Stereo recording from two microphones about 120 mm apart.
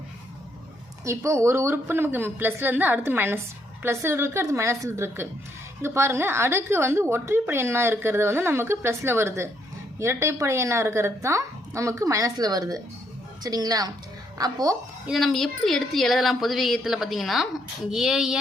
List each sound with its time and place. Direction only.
1.0 s a woman's voice: 25° right (ahead or behind)
15.0 s a woman's voice: centre (ahead or behind)